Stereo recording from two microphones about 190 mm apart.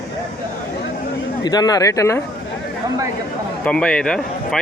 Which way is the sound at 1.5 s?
20° left (ahead or behind).